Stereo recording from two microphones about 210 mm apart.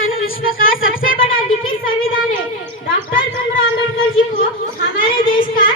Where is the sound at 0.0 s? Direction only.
45° left (ahead or behind).